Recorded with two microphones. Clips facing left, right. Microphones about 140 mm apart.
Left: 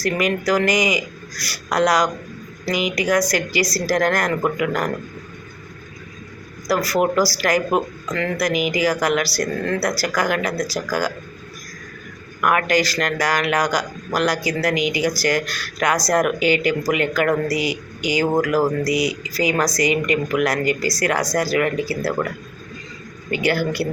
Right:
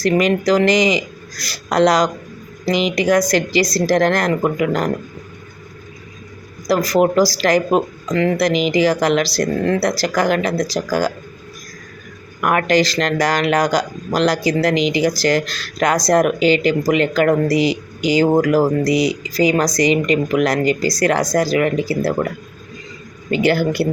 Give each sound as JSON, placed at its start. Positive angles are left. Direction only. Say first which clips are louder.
{"t": 0.0, "sound": "speech", "louder": "right 5 dB", "side_deg": -25}
{"t": 6.7, "sound": "speech", "louder": "right 4 dB", "side_deg": -20}
{"t": 12.4, "sound": "speech", "louder": "right 3 dB", "side_deg": -30}
{"t": 23.3, "sound": "speech", "louder": "right 4 dB", "side_deg": -30}